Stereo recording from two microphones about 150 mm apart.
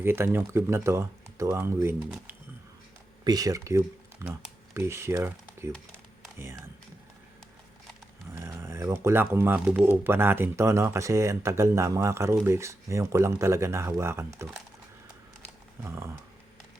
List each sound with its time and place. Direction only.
0.0 s speech: 15° right (ahead or behind)
3.2 s speech: 25° right (ahead or behind)
8.3 s speech: 15° right (ahead or behind)
15.8 s speech: 15° right (ahead or behind)